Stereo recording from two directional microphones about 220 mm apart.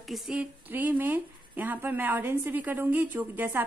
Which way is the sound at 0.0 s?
5° right (ahead or behind).